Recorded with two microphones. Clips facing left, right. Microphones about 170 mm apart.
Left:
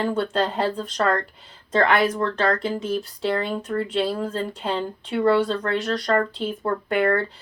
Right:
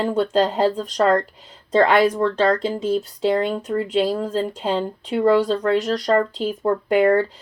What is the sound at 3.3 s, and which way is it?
Speech, 20° right (ahead or behind).